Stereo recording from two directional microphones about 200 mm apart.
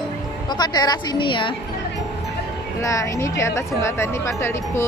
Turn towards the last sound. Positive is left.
turn(degrees=15)  # may be behind; listen again after turning